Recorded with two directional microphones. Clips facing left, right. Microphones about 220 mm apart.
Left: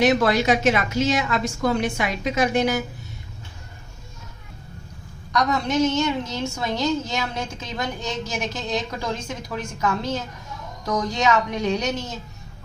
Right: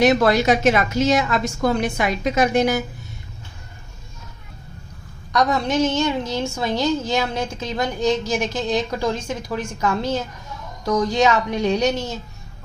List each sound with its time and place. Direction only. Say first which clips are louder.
0.0 s a woman's voice: right 3 dB; 40° right (ahead or behind)
5.3 s a woman's voice: right 2 dB; 30° right (ahead or behind)